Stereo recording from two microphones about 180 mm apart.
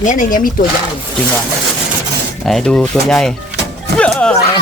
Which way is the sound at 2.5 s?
5° left (ahead or behind).